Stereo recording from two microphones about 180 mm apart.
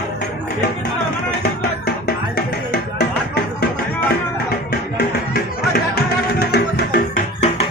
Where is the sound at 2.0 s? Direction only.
65° left (ahead or behind).